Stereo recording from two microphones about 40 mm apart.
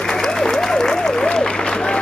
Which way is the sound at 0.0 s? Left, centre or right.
Centre.